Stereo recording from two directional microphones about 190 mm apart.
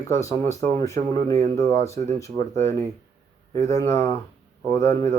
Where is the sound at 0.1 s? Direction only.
15° left (ahead or behind).